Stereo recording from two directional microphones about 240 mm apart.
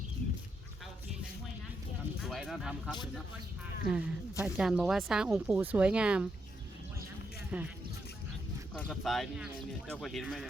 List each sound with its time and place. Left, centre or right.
2.2 s speech: centre
7.5 s speech: centre
8.7 s speech: centre